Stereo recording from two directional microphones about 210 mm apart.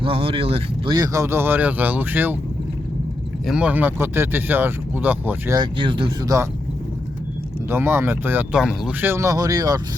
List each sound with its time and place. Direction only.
0.0 s speech: 25° right (ahead or behind)
0.9 s speech: 15° right (ahead or behind)
3.4 s speech: 5° right (ahead or behind)
5.7 s speech: 25° right (ahead or behind)
7.7 s speech: 10° right (ahead or behind)